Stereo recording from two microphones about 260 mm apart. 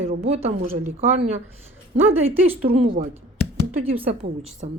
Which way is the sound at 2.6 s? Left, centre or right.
Right.